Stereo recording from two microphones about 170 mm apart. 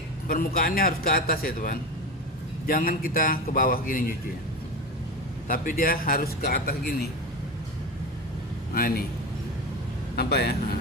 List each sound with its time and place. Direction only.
0.3 s a man's voice: 55° left (ahead or behind)
5.5 s a man's voice: 55° left (ahead or behind)
8.7 s a man's voice: 60° left (ahead or behind)
10.2 s a man's voice: 70° left (ahead or behind)